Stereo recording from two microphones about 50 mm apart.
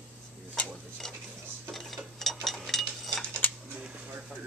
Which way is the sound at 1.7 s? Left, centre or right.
Centre.